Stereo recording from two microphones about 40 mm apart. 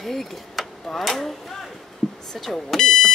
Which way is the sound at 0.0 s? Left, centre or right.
Centre.